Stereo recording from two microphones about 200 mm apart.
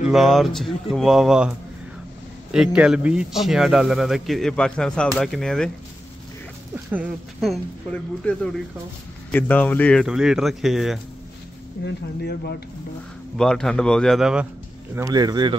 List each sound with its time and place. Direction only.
0.0 s speech: centre (ahead or behind)
2.5 s speech: 5° right (ahead or behind)
6.9 s speech: 5° right (ahead or behind)
11.8 s speech: 55° left (ahead or behind)
13.4 s speech: 5° left (ahead or behind)
15.0 s speech: 20° right (ahead or behind)